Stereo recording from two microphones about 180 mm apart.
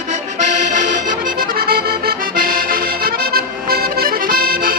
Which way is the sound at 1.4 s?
55° right (ahead or behind).